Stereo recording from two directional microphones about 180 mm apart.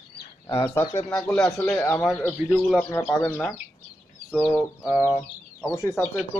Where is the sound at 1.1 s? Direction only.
5° left (ahead or behind).